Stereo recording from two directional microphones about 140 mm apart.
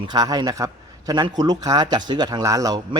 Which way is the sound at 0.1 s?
30° right (ahead or behind).